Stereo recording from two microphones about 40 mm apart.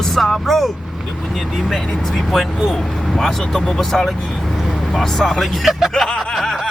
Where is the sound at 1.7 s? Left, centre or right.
Centre.